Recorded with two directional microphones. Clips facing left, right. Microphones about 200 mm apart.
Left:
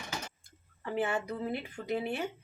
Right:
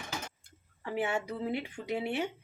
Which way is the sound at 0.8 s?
10° right (ahead or behind).